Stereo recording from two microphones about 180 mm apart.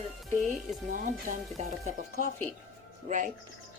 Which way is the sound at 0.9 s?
45° right (ahead or behind).